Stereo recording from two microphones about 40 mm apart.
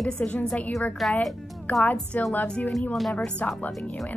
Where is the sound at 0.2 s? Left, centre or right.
Left.